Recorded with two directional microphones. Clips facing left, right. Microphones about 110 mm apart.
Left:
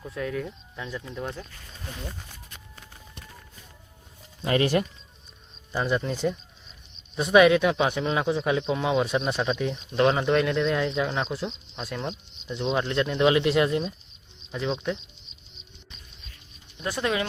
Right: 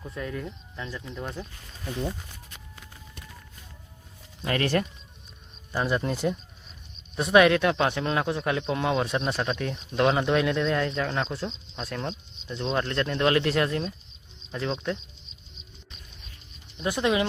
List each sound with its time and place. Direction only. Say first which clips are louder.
0.0 s speech: left 3 dB; centre (ahead or behind)
4.4 s speech: left 3 dB; 20° left (ahead or behind)
5.7 s speech: even; 5° right (ahead or behind)
16.7 s speech: right 2 dB; 20° right (ahead or behind)